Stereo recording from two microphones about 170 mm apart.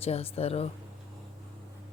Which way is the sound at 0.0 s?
35° left (ahead or behind).